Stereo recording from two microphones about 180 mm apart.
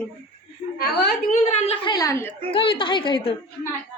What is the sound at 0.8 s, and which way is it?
Speech, 60° left (ahead or behind).